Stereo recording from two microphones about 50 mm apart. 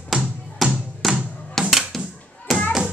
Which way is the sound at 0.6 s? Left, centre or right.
Centre.